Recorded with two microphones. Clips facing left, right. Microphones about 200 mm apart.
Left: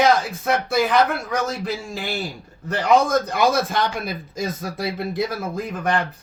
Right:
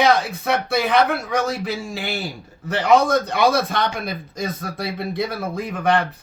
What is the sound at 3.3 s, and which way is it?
Speech, 65° right (ahead or behind).